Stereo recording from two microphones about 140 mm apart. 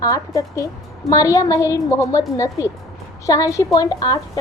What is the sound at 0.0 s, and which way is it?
A woman's voice, 25° left (ahead or behind).